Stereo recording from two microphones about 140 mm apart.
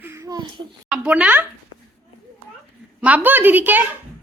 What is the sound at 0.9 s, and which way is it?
Speech, 10° right (ahead or behind).